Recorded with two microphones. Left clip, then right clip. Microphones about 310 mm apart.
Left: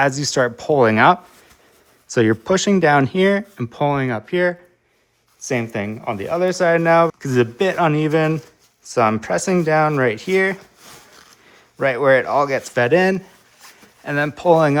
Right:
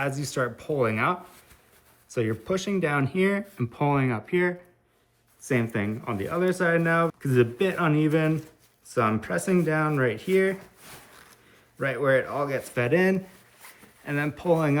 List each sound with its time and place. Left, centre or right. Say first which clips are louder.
0.0 s speech: left 11 dB; centre
11.8 s speech: left 9 dB; centre